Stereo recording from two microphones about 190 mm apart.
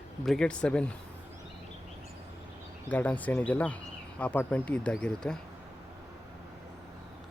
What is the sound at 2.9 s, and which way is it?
Speech, 10° left (ahead or behind).